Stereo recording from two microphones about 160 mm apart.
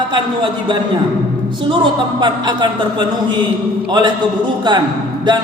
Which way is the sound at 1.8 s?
30° right (ahead or behind).